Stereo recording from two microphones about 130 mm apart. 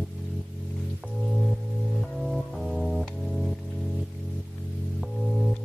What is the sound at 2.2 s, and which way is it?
Music, centre (ahead or behind).